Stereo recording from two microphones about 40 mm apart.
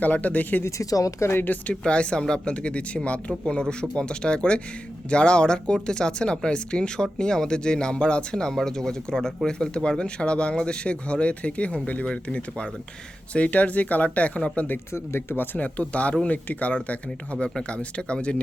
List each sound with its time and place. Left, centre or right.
0.0 s speech: left
0.8 s speech: left
1.7 s speech: left
14.9 s speech: left
15.5 s speech: left